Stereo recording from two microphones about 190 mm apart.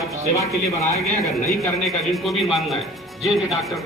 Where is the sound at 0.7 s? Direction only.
15° left (ahead or behind).